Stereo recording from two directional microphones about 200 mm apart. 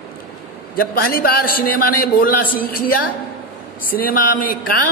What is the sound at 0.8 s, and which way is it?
A man's voice, 45° left (ahead or behind).